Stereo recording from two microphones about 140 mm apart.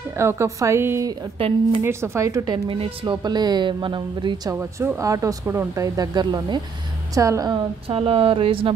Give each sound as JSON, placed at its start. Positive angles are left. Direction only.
{"t": 0.2, "sound": "speech", "side_deg": -20}
{"t": 1.4, "sound": "speech", "side_deg": -40}
{"t": 1.8, "sound": "speech", "side_deg": -20}
{"t": 4.6, "sound": "speech", "side_deg": -20}
{"t": 7.9, "sound": "speech", "side_deg": -45}